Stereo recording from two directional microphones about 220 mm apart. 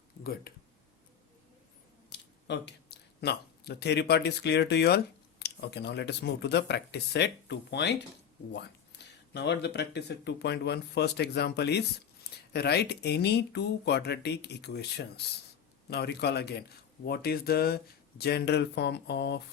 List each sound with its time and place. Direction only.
2.0 s speech: 50° left (ahead or behind)